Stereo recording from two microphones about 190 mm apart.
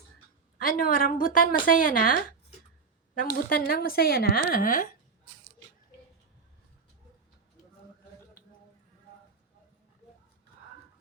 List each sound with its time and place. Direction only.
0.6 s a woman's voice: 45° left (ahead or behind)